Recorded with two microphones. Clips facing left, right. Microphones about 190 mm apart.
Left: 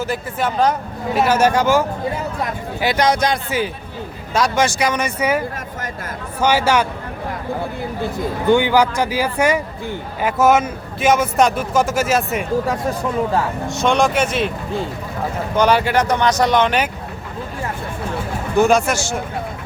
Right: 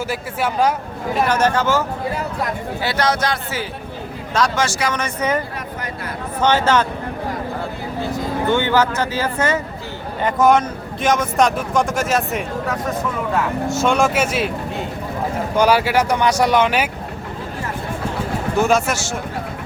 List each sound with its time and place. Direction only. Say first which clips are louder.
0.1 s speech: left 1 dB; 10° right (ahead or behind)
1.1 s speech: left 2 dB; 10° left (ahead or behind)
2.8 s speech: left 3 dB; 15° left (ahead or behind)
6.4 s speech: even; 10° left (ahead or behind)
8.4 s speech: left 4 dB; 15° left (ahead or behind)
12.6 s speech: left 2 dB; 30° left (ahead or behind)
13.7 s speech: left 1 dB; 5° right (ahead or behind)
15.5 s speech: even; 5° right (ahead or behind)
18.6 s speech: left 3 dB; 5° right (ahead or behind)